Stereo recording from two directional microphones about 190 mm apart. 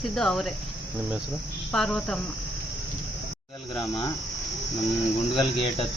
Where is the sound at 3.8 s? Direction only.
25° left (ahead or behind).